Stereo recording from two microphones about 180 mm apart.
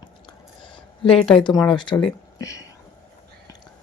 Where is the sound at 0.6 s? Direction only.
25° left (ahead or behind).